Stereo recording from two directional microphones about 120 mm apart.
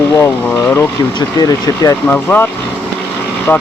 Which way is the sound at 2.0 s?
15° left (ahead or behind).